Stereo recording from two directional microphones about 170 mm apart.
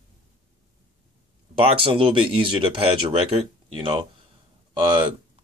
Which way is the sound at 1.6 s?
35° right (ahead or behind).